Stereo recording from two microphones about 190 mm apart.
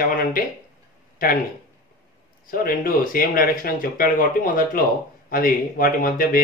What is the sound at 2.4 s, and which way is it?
Speech, 45° left (ahead or behind).